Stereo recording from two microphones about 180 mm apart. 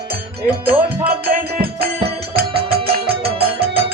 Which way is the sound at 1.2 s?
55° right (ahead or behind).